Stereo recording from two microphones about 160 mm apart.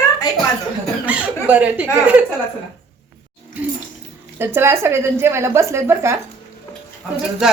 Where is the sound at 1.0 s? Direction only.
10° right (ahead or behind).